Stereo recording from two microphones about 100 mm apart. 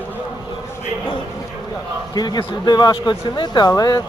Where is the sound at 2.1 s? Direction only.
45° left (ahead or behind).